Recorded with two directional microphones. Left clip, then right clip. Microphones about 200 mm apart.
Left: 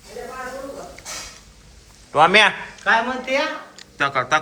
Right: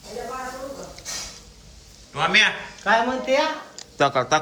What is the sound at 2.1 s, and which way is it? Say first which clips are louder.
Speech: left 5 dB; 5° left (ahead or behind).